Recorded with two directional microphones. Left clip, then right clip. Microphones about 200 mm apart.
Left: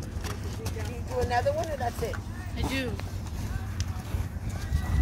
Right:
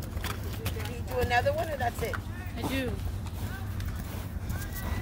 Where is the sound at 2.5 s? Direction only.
40° right (ahead or behind).